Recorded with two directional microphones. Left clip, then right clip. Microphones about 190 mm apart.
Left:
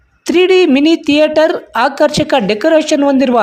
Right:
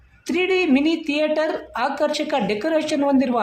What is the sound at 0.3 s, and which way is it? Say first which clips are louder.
A woman's voice: left 10 dB; 40° left (ahead or behind).